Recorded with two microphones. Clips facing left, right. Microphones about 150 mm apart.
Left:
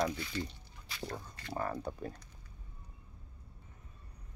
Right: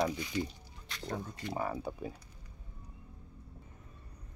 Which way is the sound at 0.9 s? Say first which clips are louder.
Right 3 dB; 5° left (ahead or behind).